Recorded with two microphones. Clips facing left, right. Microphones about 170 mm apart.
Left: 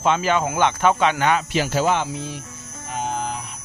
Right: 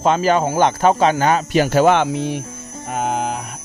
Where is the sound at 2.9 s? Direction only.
60° right (ahead or behind).